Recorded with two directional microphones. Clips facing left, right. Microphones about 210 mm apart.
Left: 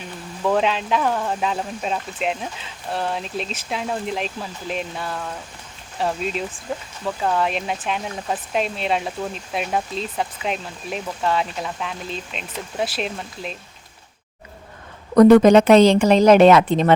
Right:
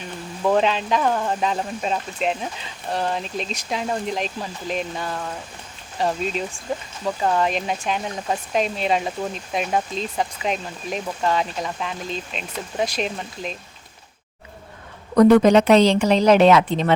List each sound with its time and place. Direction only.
0.4 s speech: centre (ahead or behind)
15.1 s speech: 45° left (ahead or behind)